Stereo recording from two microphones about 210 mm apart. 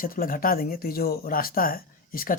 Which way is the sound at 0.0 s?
45° left (ahead or behind).